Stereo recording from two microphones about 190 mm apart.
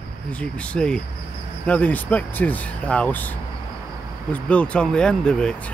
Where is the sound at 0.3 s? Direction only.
5° left (ahead or behind).